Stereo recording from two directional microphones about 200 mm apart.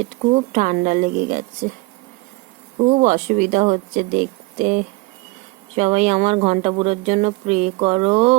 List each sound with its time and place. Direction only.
0.2 s speech: 40° right (ahead or behind)
3.0 s speech: 40° right (ahead or behind)